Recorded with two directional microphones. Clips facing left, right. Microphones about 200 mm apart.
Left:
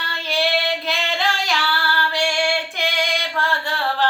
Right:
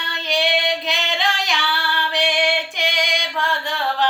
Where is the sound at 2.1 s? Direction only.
20° right (ahead or behind).